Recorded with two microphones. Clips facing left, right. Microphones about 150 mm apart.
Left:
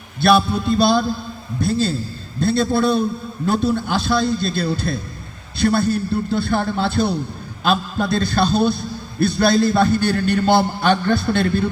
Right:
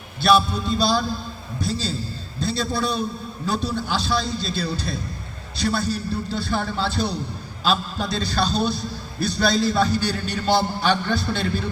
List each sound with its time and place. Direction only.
0.2 s a man's voice: 55° left (ahead or behind)